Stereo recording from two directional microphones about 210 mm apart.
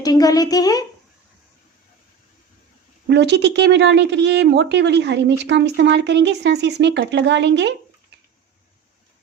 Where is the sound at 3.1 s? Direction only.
55° right (ahead or behind).